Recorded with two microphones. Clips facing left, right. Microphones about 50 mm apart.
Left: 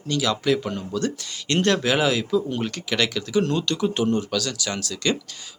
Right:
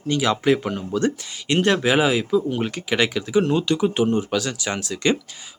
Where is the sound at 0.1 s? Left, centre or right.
Right.